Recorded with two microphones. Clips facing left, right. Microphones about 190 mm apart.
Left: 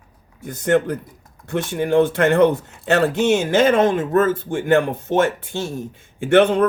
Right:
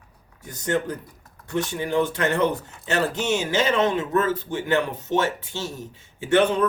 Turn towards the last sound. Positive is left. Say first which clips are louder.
# left 5 dB
turn(degrees=60)  # may be behind; listen again after turning